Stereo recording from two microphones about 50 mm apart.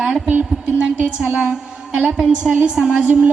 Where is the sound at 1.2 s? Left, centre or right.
Centre.